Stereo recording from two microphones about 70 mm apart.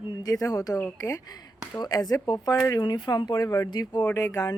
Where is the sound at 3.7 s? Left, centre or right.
Left.